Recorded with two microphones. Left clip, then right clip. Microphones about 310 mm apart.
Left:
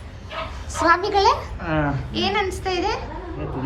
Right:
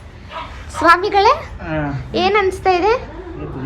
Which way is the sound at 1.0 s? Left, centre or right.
Centre.